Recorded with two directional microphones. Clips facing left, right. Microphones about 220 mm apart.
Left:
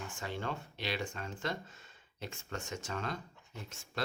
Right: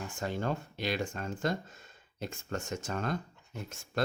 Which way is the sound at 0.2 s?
45° right (ahead or behind).